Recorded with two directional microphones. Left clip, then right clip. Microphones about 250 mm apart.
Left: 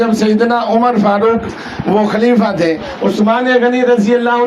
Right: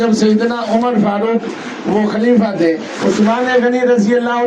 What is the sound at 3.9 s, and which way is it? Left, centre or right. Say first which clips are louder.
Speech: left 2 dB; left.